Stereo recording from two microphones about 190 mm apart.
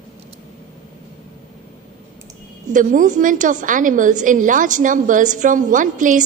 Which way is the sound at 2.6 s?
45° right (ahead or behind).